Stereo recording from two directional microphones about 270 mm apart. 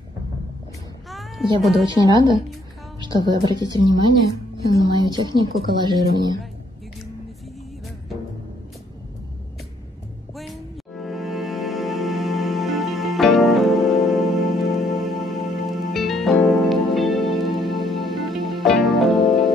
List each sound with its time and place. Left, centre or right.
1.9 s speech: centre
11.0 s music: centre